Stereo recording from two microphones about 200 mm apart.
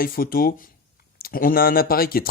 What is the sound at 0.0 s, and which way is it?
Speech, 45° left (ahead or behind).